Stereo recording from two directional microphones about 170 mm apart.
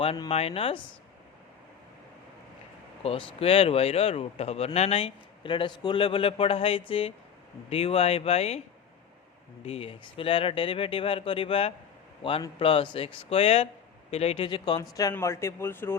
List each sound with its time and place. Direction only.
0.0 s speech: 35° left (ahead or behind)
3.0 s speech: 35° left (ahead or behind)
9.6 s a man's voice: 35° left (ahead or behind); by 16.0 s 15° left (ahead or behind)